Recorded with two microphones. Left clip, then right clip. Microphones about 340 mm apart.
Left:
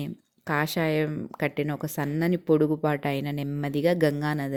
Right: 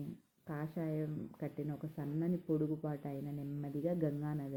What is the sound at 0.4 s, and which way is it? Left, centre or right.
Speech, left.